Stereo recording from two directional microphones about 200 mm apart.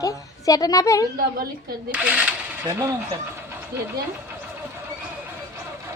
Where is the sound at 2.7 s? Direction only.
15° right (ahead or behind).